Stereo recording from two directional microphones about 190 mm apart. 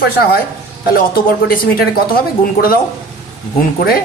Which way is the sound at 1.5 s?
50° left (ahead or behind).